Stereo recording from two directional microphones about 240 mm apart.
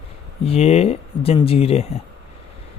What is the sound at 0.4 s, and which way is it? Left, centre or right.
Speech, left.